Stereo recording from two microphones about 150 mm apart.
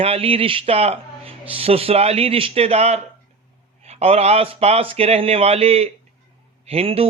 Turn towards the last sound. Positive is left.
turn(degrees=-40)  # may be behind; listen again after turning